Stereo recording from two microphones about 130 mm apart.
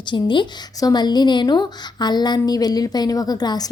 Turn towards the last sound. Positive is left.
turn(degrees=30)  # may be behind; listen again after turning